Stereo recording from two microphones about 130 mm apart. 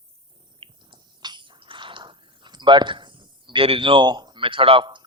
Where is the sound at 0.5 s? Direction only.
40° right (ahead or behind).